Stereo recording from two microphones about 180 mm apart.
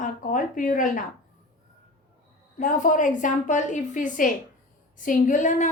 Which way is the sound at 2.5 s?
50° left (ahead or behind).